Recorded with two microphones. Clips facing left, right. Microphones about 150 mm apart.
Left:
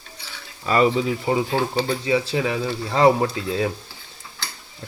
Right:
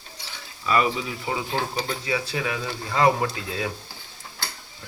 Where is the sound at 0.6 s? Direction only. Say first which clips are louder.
Left 5 dB; 35° left (ahead or behind).